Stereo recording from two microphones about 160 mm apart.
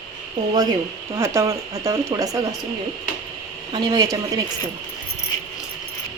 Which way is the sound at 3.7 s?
25° right (ahead or behind).